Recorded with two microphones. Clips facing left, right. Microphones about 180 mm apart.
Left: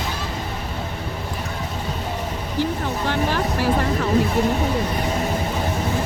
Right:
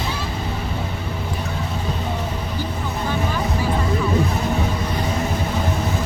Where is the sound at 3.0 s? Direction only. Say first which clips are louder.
Left 1 dB; 75° left (ahead or behind).